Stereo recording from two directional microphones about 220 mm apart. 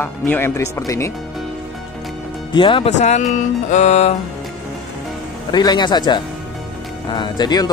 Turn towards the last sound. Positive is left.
turn(degrees=20)  # may be behind; listen again after turning